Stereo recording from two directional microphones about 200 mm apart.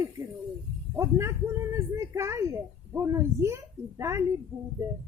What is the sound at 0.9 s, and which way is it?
Speech, 15° right (ahead or behind).